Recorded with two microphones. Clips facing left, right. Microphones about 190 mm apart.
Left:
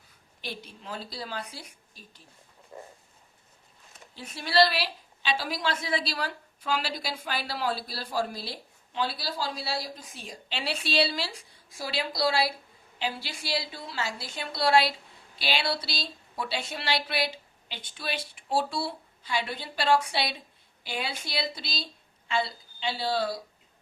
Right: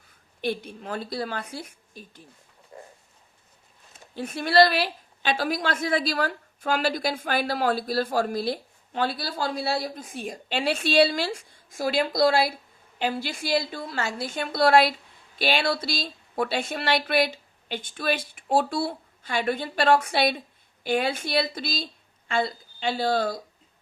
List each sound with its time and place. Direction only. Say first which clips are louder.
0.4 s a woman's voice: right 10 dB; 55° right (ahead or behind)
4.1 s a woman's voice: right 6 dB; 55° right (ahead or behind)